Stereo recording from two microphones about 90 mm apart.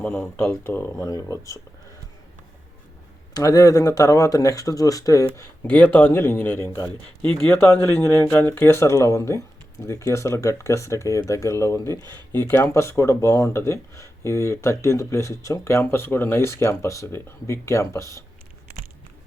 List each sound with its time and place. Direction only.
0.3 s speech: 10° left (ahead or behind)
0.6 s speech: 25° left (ahead or behind)
0.9 s speech: 40° left (ahead or behind)
3.3 s speech: 40° left (ahead or behind)
5.6 s speech: 20° left (ahead or behind)
6.7 s speech: 35° left (ahead or behind)
7.2 s speech: 90° right
7.6 s speech: 25° left (ahead or behind)